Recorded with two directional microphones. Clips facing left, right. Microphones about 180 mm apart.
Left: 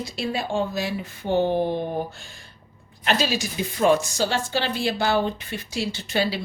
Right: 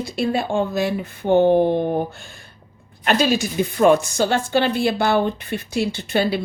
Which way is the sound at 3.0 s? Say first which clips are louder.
Right 5 dB; 55° right (ahead or behind).